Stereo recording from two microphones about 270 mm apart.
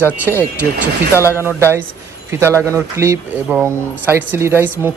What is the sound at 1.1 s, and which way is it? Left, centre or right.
Speech, centre.